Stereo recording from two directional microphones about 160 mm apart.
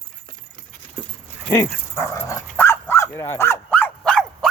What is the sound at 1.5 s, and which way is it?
Dog, 15° left (ahead or behind).